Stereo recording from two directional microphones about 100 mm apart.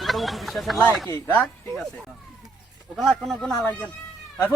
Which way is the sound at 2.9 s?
Centre (ahead or behind).